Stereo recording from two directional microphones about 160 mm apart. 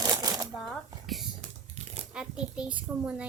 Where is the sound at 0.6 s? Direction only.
Centre (ahead or behind).